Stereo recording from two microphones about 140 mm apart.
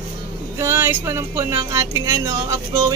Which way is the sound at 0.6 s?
20° right (ahead or behind).